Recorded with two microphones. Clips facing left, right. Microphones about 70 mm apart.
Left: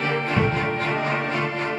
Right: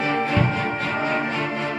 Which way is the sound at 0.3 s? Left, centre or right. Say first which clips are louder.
Even; centre.